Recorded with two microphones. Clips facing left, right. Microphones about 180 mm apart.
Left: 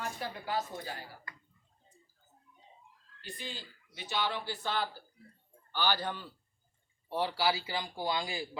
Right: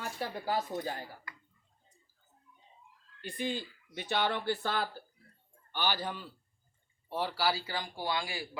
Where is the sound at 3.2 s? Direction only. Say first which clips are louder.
Right 9 dB; 55° right (ahead or behind).